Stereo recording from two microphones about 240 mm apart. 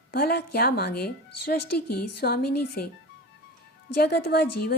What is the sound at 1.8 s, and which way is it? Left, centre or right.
Speech, left.